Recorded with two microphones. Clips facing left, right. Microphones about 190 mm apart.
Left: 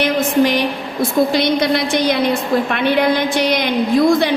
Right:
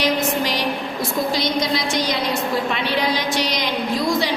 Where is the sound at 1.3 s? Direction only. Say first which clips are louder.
Left 6 dB; 60° left (ahead or behind).